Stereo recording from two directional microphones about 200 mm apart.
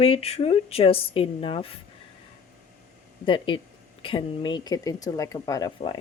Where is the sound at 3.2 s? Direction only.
25° left (ahead or behind).